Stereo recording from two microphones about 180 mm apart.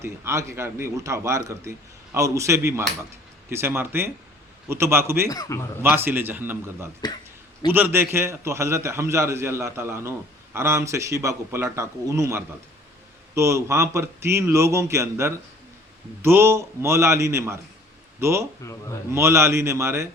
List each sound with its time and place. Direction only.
0.0 s a man's voice: 15° right (ahead or behind)
5.3 s a man's voice: 20° left (ahead or behind)
5.8 s a man's voice: 10° right (ahead or behind)
7.0 s a man's voice: 25° left (ahead or behind)
7.7 s a man's voice: 10° right (ahead or behind)
18.6 s speech: 15° left (ahead or behind)
19.1 s a man's voice: 15° right (ahead or behind)